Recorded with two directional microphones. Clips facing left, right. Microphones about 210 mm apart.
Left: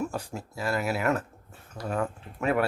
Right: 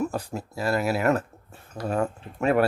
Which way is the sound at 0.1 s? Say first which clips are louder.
Right 4 dB; 35° right (ahead or behind).